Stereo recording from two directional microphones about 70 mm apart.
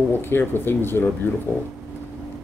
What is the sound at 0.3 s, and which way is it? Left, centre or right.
Speech, left.